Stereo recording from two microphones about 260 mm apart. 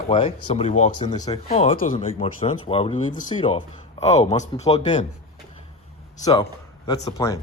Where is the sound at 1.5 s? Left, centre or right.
Left.